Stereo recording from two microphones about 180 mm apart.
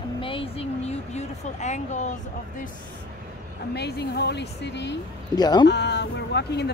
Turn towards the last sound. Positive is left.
turn(degrees=70)  # may be behind; listen again after turning